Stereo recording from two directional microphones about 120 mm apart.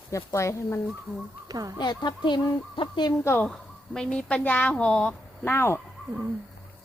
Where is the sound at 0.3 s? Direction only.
25° left (ahead or behind).